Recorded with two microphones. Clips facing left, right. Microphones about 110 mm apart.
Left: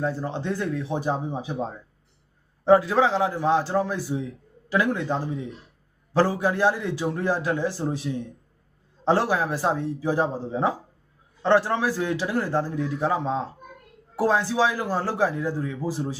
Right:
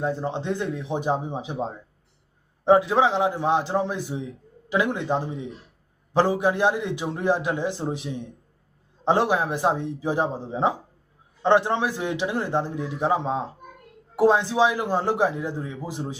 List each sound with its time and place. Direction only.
0.0 s a man's voice: 20° right (ahead or behind)